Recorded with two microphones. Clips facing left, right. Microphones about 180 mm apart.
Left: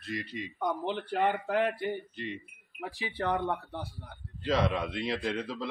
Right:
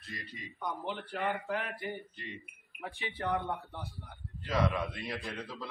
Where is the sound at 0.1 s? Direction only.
85° left.